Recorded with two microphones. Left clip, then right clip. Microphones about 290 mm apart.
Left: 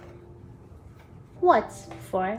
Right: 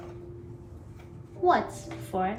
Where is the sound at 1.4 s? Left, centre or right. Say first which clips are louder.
Left 3 dB; left.